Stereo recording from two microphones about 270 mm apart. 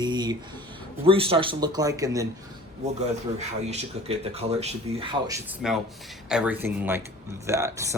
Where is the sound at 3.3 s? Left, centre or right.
Right.